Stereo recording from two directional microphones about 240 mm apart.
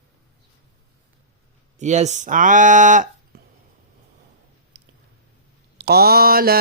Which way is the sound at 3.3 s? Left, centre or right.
Right.